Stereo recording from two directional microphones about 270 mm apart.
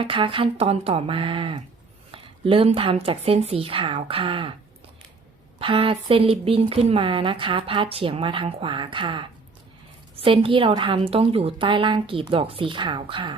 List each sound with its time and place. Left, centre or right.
0.0 s speech: centre
5.5 s speech: centre